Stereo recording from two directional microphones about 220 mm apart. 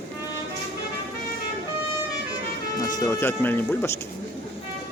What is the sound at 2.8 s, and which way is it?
Speech, 15° left (ahead or behind).